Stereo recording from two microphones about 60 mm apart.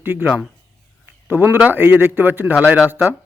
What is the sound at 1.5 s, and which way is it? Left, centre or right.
Speech, right.